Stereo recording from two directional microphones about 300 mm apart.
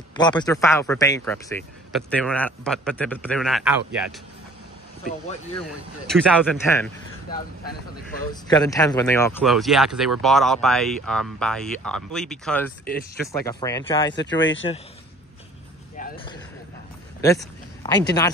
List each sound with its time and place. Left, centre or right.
0.2 s speech: centre
6.0 s speech: centre
8.3 s speech: centre
14.1 s speech: left
16.0 s vehicle: left
17.2 s speech: centre